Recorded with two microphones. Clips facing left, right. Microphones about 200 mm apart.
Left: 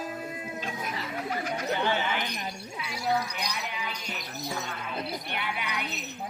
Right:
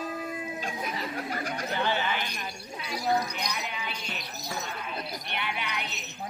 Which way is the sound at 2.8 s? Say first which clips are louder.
Right 5 dB; 35° right (ahead or behind).